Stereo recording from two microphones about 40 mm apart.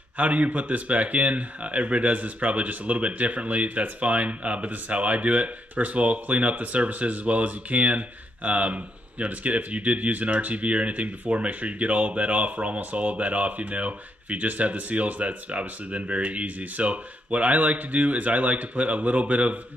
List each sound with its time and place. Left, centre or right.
0.2 s speech: right